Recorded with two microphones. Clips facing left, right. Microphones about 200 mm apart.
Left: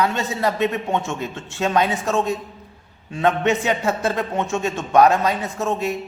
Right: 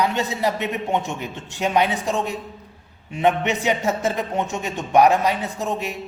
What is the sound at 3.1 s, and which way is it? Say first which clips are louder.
A man's voice: left 1 dB; 15° right (ahead or behind).